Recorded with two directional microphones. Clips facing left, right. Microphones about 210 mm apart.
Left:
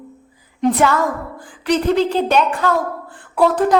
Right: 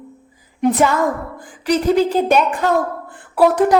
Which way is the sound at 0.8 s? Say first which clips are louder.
Right 1 dB; 15° right (ahead or behind).